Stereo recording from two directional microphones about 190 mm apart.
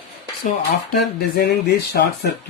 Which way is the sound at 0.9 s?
55° left (ahead or behind).